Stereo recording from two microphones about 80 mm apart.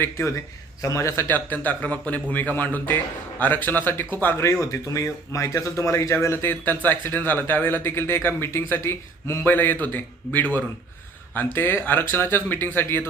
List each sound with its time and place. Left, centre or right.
0.8 s speech: left
11.5 s speech: left